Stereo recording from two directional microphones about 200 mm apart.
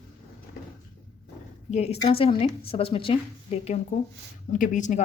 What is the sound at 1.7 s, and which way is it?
A woman's voice, 35° left (ahead or behind).